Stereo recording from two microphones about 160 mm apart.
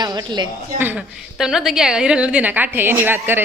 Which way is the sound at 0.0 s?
25° right (ahead or behind).